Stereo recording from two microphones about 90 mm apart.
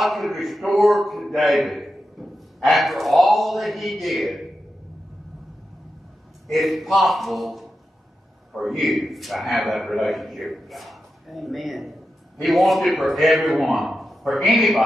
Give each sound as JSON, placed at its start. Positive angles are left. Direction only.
{"t": 0.0, "sound": "a man's voice", "side_deg": 0}
{"t": 6.4, "sound": "a man's voice", "side_deg": 0}